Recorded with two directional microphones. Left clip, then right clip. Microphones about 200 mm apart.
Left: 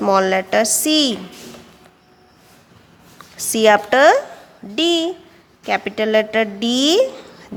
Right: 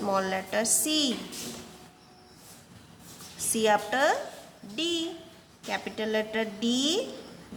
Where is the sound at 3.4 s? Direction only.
50° left (ahead or behind).